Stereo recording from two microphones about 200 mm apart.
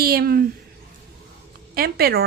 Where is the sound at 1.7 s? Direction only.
50° right (ahead or behind).